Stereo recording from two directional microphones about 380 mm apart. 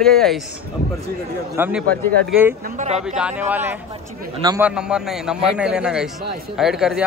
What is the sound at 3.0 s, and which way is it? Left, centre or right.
A man's voice, centre.